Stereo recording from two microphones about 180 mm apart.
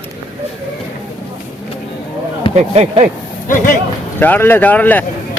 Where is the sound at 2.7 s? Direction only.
40° right (ahead or behind).